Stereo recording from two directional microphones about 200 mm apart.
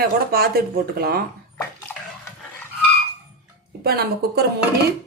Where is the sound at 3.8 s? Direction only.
50° right (ahead or behind).